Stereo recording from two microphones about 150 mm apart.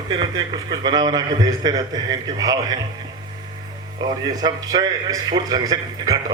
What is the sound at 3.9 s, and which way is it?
A man's voice, 25° right (ahead or behind).